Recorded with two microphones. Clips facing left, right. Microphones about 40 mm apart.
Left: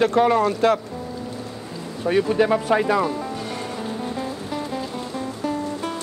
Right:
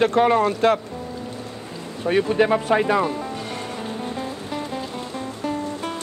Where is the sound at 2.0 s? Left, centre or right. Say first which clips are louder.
Even; right.